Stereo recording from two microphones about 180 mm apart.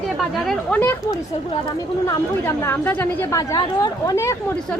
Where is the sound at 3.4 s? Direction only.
20° left (ahead or behind).